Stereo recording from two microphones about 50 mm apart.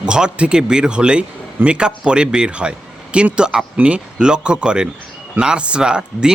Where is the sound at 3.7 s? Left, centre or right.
Right.